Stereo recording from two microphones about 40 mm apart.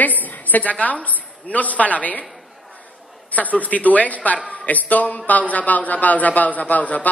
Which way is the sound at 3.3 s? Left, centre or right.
Left.